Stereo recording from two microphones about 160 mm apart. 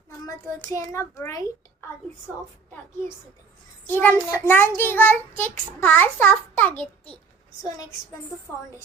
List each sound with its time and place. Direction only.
0.3 s a child's voice: 20° left (ahead or behind)
4.0 s child singing: 15° left (ahead or behind)